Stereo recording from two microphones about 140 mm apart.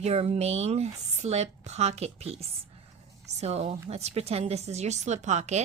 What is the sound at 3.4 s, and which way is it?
Speech, 50° right (ahead or behind).